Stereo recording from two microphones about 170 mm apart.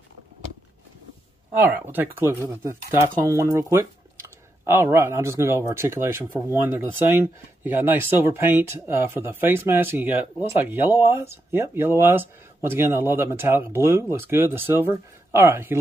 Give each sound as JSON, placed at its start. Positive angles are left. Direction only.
{"t": 1.6, "sound": "speech", "side_deg": -10}